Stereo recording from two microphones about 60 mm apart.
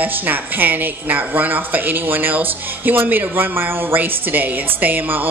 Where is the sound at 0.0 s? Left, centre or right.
Right.